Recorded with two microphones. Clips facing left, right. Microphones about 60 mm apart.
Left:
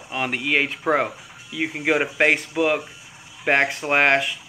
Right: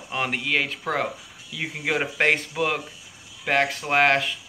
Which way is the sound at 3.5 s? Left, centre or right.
Left.